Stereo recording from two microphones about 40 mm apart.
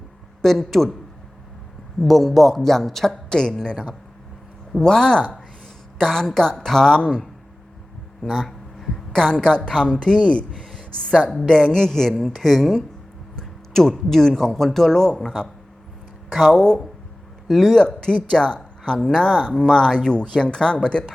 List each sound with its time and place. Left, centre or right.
0.4 s speech: centre
2.0 s speech: centre
3.3 s speech: centre
8.4 s speech: centre; by 10.6 s left
10.6 s a sound: centre
11.4 s speech: centre
16.3 s speech: centre
17.5 s speech: centre
17.7 s speech: centre